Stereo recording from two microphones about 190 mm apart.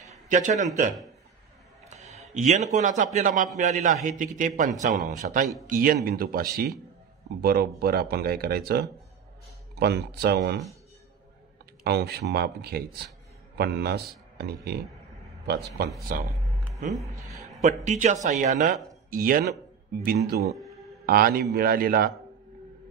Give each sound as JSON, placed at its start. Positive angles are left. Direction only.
{"t": 0.3, "sound": "speech", "side_deg": -40}
{"t": 1.9, "sound": "a man's voice", "side_deg": -35}
{"t": 11.8, "sound": "a man's voice", "side_deg": -55}
{"t": 17.6, "sound": "speech", "side_deg": -40}